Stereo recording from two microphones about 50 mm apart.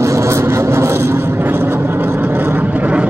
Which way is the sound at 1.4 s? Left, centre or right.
Right.